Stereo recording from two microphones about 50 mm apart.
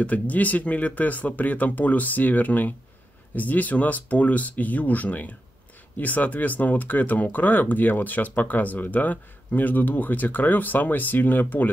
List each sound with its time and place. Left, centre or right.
0.0 s speech: left